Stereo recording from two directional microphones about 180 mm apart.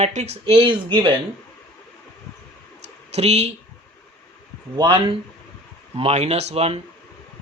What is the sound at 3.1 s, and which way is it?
Speech, 35° right (ahead or behind).